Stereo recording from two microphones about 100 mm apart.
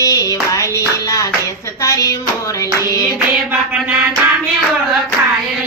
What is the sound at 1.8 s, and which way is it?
Clapping, 35° left (ahead or behind).